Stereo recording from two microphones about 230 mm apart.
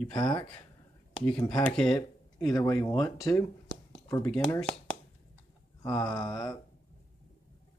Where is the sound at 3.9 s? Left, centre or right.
Centre.